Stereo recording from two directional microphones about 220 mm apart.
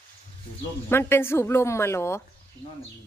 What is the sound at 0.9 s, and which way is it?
Speech, 10° left (ahead or behind).